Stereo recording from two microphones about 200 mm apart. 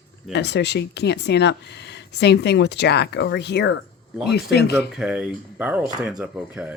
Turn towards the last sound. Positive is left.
turn(degrees=-5)  # may be behind; listen again after turning